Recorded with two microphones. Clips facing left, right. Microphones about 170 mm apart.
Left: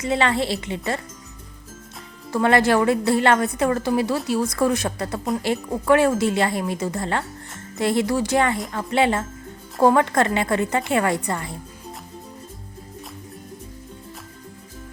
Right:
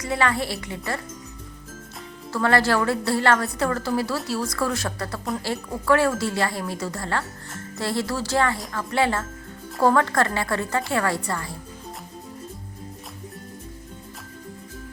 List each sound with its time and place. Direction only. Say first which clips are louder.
0.0 s a woman's voice: left 3 dB; 25° left (ahead or behind)
2.3 s a woman's voice: left 3 dB; 20° left (ahead or behind)